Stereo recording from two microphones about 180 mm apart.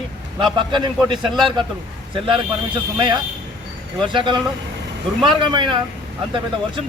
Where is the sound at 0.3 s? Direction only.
25° right (ahead or behind).